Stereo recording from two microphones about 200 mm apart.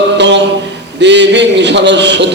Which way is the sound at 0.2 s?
60° right (ahead or behind).